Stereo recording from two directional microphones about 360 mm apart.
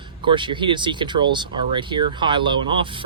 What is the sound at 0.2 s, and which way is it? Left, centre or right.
Speech, centre.